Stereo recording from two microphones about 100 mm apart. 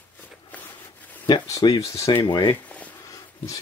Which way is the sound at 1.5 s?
35° left (ahead or behind).